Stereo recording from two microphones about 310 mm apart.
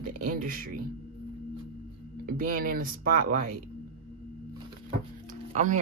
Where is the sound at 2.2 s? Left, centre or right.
Right.